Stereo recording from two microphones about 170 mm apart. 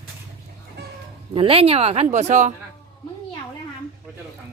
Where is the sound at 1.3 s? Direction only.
35° right (ahead or behind).